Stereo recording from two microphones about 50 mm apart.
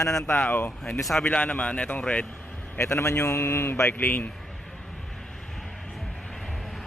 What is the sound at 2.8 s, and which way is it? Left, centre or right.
A man's voice, left.